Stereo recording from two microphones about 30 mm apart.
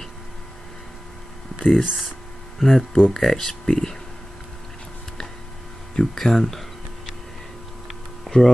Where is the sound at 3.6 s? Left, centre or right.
Left.